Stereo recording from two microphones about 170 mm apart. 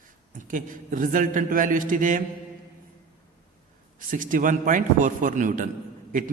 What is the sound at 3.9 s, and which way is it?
A man's voice, 50° right (ahead or behind).